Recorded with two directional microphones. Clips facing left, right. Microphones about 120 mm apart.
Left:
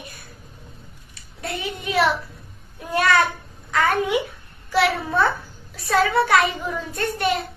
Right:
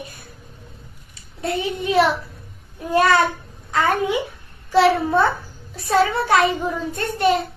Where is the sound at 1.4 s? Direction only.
30° right (ahead or behind).